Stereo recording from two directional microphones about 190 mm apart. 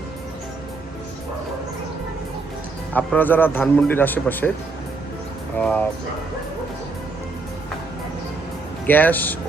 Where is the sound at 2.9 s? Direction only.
10° left (ahead or behind).